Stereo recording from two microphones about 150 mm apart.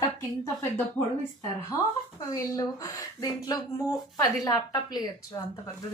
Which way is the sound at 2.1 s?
20° left (ahead or behind).